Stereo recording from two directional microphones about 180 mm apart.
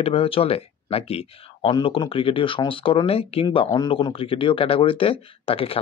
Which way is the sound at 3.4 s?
20° left (ahead or behind).